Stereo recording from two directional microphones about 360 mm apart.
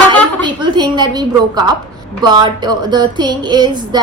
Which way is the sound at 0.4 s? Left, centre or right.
Centre.